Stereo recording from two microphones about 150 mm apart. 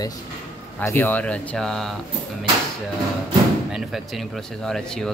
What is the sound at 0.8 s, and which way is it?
Speech, 10° left (ahead or behind).